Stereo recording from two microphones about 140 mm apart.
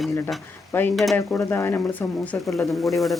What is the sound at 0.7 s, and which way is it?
Speech, 15° left (ahead or behind).